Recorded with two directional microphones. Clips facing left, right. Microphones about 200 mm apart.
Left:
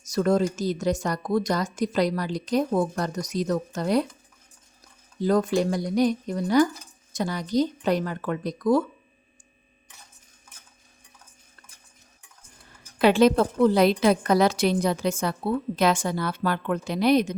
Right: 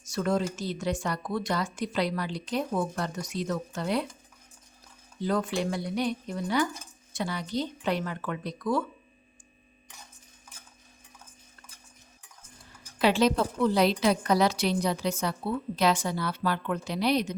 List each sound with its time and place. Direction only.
0.0 s speech: 40° left (ahead or behind)
5.2 s speech: 40° left (ahead or behind)
13.0 s a woman's voice: 50° left (ahead or behind)